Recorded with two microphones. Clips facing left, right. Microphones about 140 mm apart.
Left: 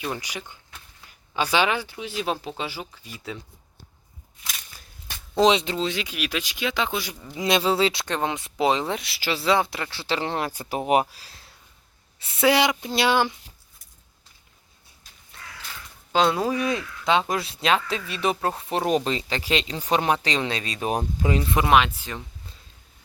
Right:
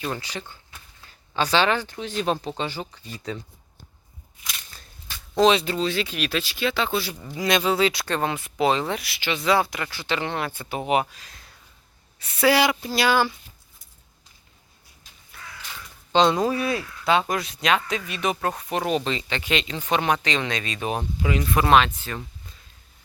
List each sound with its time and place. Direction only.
0.0 s speech: 15° left (ahead or behind)
5.4 s speech: 20° left (ahead or behind)
8.0 s speech: 20° left (ahead or behind)
9.2 s speech: 35° left (ahead or behind)
12.5 s speech: 20° left (ahead or behind)
16.1 s speech: 5° left (ahead or behind)